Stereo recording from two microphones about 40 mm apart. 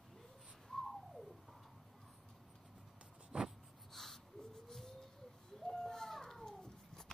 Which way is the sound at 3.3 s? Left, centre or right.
Right.